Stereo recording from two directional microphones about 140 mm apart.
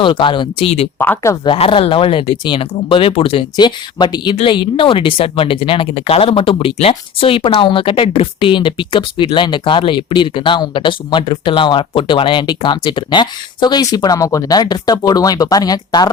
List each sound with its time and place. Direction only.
0.0 s speech: 35° left (ahead or behind)
0.9 s speech: 15° left (ahead or behind)
1.5 s speech: 40° left (ahead or behind)